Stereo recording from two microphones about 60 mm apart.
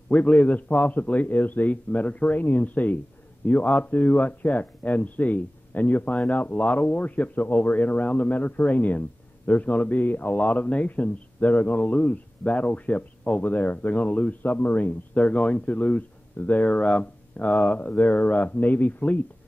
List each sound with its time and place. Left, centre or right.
0.1 s speech: left